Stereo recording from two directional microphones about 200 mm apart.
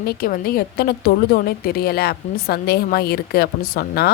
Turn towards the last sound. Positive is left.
turn(degrees=50)  # may be behind; listen again after turning